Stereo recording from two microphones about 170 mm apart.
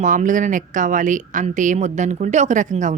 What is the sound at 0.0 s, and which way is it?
Speech, 50° right (ahead or behind).